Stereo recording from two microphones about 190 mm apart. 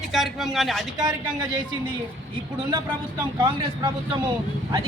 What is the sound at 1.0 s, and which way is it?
Speech, 20° right (ahead or behind).